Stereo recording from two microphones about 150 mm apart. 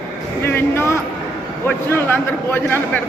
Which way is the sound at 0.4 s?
15° left (ahead or behind).